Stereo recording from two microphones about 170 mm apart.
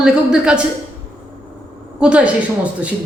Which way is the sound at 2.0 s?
5° right (ahead or behind).